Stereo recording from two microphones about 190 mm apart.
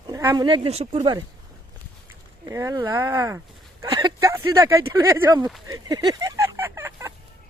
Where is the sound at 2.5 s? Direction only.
15° right (ahead or behind).